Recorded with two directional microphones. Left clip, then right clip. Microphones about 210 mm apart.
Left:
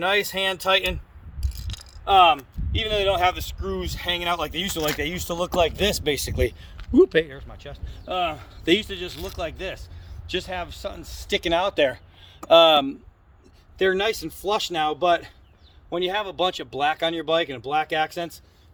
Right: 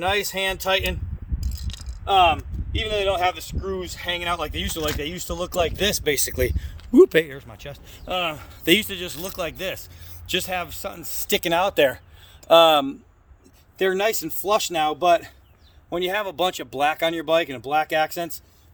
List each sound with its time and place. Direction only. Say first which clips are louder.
0.0 s speech: left 1 dB; 15° left (ahead or behind)
1.4 s a sound: left 1 dB; 20° left (ahead or behind)
2.7 s speech: left 1 dB; 15° left (ahead or behind); by 6.1 s 5° right (ahead or behind)
6.1 s speech: right 1 dB; 20° right (ahead or behind); by 11.9 s 40° right (ahead or behind)
12.5 s speech: even; 25° right (ahead or behind)